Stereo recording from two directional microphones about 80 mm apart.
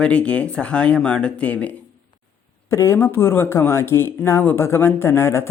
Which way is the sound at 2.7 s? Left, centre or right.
Left.